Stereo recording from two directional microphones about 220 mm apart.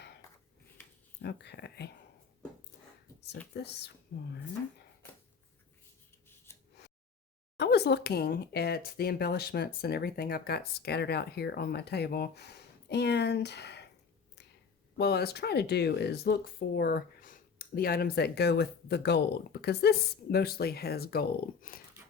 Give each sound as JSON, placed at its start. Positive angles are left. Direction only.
{"t": 1.2, "sound": "speech", "side_deg": 50}
{"t": 3.5, "sound": "speech", "side_deg": 50}
{"t": 6.2, "sound": "scissors", "side_deg": 10}
{"t": 7.6, "sound": "speech", "side_deg": 50}
{"t": 14.9, "sound": "speech", "side_deg": 45}